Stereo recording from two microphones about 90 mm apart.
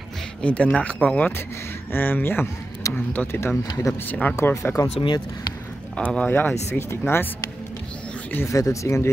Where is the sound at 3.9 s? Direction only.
35° left (ahead or behind).